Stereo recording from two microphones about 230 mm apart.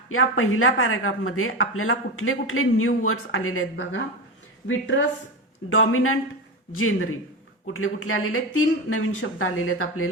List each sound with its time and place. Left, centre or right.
0.1 s a woman's voice: left